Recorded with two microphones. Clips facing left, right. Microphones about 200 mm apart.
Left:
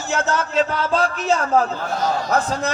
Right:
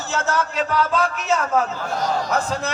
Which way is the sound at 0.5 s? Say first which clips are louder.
Left 4 dB; 25° left (ahead or behind).